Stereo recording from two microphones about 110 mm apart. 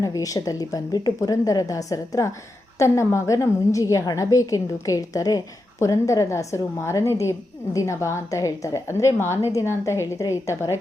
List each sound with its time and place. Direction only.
0.0 s a woman's voice: 30° left (ahead or behind)